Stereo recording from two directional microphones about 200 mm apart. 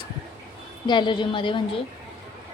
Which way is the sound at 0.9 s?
25° left (ahead or behind).